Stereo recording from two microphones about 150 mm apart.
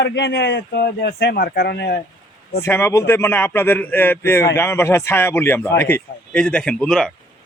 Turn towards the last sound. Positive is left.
turn(degrees=5)  # may be behind; listen again after turning